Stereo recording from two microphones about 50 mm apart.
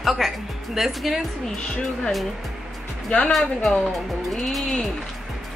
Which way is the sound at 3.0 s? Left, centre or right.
Centre.